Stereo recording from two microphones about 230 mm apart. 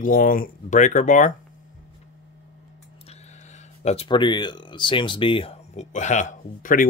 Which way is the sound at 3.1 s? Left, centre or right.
Left.